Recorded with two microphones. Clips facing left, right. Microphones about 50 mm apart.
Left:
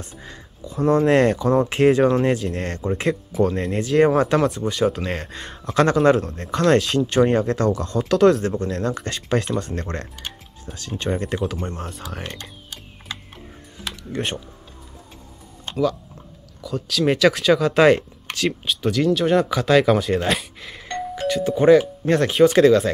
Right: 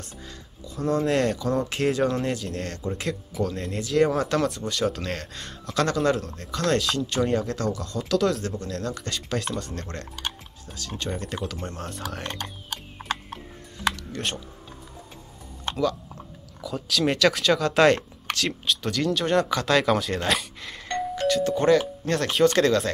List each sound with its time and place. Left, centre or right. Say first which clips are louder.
0.2 s a sound: left 4 dB; left
1.7 s speech: left 9 dB; left
4.4 s speech: left 5 dB; centre
11.5 s speech: left 4 dB; centre
14.1 s speech: left 4 dB; left
15.7 s speech: left 4 dB; centre